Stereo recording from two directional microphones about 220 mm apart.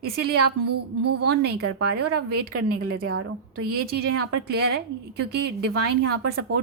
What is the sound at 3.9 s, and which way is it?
Speech, 45° right (ahead or behind).